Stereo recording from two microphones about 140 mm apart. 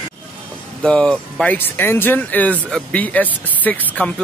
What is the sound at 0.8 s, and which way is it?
Speech, 5° left (ahead or behind).